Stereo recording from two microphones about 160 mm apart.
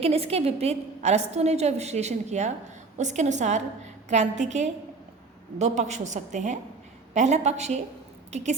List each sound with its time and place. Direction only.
0.0 s a woman's voice: 40° right (ahead or behind)